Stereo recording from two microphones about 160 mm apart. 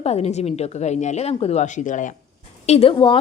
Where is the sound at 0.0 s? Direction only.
40° left (ahead or behind).